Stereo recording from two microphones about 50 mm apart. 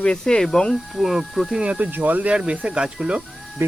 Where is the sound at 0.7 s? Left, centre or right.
Centre.